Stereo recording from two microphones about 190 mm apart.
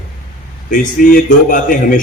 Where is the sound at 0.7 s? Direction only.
45° left (ahead or behind).